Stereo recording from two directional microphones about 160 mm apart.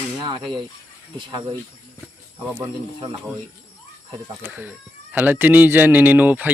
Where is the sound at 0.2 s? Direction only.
30° right (ahead or behind).